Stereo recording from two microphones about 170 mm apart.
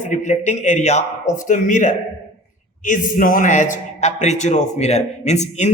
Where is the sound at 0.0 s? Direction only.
45° left (ahead or behind).